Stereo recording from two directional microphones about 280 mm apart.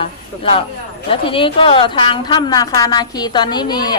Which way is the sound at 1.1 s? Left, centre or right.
Centre.